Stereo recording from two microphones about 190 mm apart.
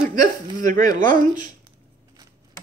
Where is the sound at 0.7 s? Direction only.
20° left (ahead or behind).